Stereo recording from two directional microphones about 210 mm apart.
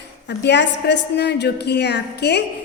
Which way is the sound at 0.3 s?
55° left (ahead or behind).